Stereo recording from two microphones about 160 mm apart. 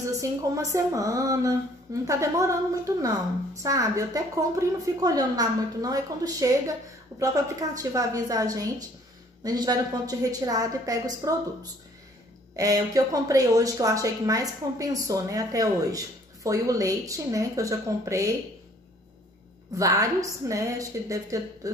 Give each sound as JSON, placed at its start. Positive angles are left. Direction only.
{"t": 0.0, "sound": "a woman's voice", "side_deg": -20}
{"t": 7.7, "sound": "a woman's voice", "side_deg": -20}
{"t": 19.8, "sound": "a woman's voice", "side_deg": -20}